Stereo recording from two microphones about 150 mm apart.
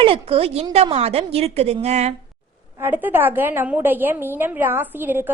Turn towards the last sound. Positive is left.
turn(degrees=-15)  # may be behind; listen again after turning